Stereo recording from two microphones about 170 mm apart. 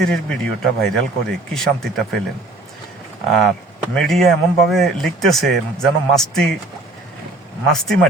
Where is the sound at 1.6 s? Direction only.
Centre (ahead or behind).